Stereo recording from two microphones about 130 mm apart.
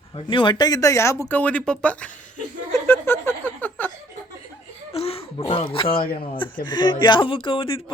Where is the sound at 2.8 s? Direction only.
15° left (ahead or behind).